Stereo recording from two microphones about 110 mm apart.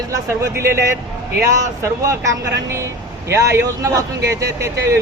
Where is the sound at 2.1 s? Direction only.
30° right (ahead or behind).